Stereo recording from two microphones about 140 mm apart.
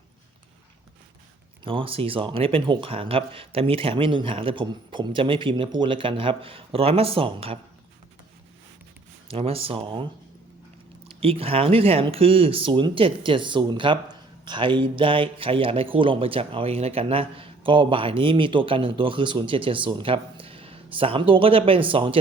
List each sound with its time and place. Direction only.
1.6 s speech: 40° right (ahead or behind)
9.3 s speech: 45° right (ahead or behind)
11.2 s speech: 45° right (ahead or behind)